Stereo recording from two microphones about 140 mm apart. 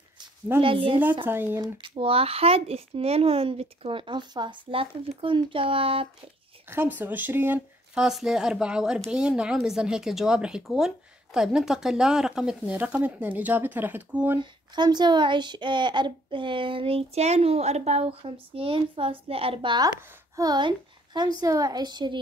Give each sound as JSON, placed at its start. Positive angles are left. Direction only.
{"t": 0.6, "sound": "speech", "side_deg": -40}
{"t": 1.2, "sound": "speech", "side_deg": -15}
{"t": 1.6, "sound": "speech", "side_deg": -40}
{"t": 6.7, "sound": "speech", "side_deg": -15}
{"t": 14.4, "sound": "a woman's voice", "side_deg": -30}